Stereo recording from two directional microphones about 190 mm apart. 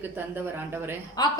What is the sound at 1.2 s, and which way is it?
Speech, 20° left (ahead or behind).